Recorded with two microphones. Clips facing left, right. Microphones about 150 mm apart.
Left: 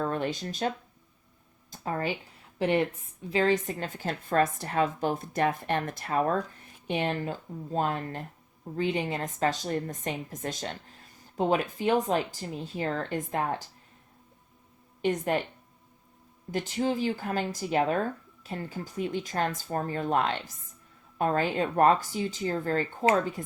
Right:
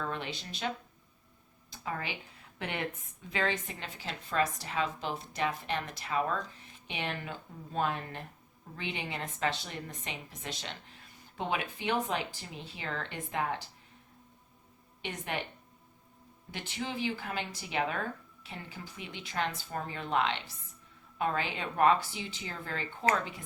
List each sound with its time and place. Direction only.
0.0 s a woman's voice: 45° left (ahead or behind)
1.7 s a woman's voice: 40° left (ahead or behind)
15.0 s a woman's voice: 45° left (ahead or behind)
16.5 s a woman's voice: 40° left (ahead or behind)